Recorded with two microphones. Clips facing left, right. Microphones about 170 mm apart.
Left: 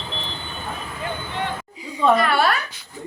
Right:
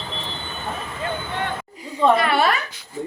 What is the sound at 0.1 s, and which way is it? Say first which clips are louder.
Vehicle: left 1 dB; centre (ahead or behind).